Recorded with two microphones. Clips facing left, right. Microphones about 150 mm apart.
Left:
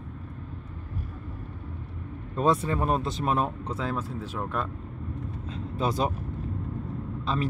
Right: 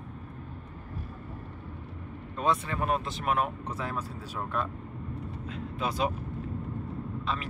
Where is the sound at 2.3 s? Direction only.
40° left (ahead or behind).